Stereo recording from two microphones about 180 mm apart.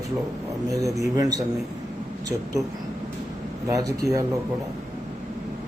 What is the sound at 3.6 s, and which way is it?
Speech, 20° right (ahead or behind).